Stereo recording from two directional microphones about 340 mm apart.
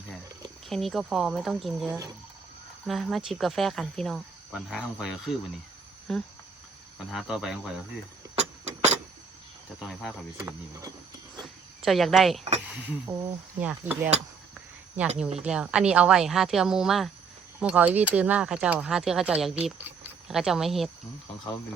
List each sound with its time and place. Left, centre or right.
0.7 s speech: centre
8.4 s a sound: centre
9.8 s speech: centre
15.4 s speech: centre